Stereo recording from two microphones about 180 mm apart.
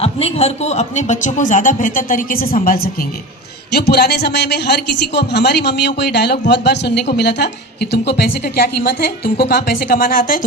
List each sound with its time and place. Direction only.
0.0 s a man's voice: 35° left (ahead or behind); by 10.4 s 50° left (ahead or behind)